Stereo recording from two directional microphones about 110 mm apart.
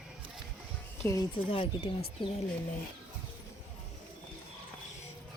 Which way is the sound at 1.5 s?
55° left (ahead or behind).